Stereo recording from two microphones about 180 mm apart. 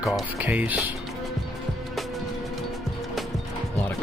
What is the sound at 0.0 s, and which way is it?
Speech, 5° right (ahead or behind).